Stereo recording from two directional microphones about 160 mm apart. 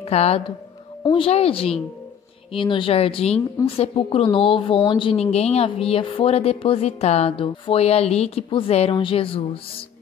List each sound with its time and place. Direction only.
0.0 s a woman's voice: 40° left (ahead or behind)